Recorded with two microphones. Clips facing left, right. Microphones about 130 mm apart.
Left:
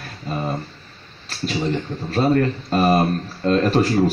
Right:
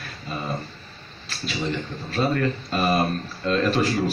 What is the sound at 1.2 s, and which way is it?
Speech, 40° left (ahead or behind).